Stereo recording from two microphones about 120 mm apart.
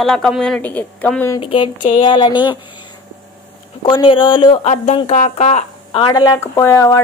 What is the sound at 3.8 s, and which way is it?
Speech, 45° left (ahead or behind).